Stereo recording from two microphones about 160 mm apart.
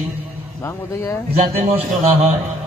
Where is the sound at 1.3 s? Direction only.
40° right (ahead or behind).